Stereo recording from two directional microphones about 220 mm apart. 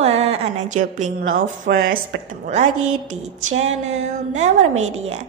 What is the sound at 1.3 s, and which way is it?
Speech, 45° right (ahead or behind).